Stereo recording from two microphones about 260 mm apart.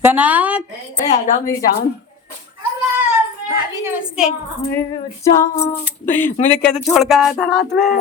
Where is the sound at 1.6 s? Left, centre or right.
Left.